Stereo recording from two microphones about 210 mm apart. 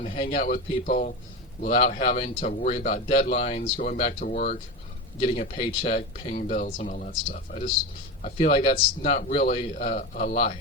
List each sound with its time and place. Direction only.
0.0 s speech: 30° left (ahead or behind)
6.3 s speech: 40° left (ahead or behind)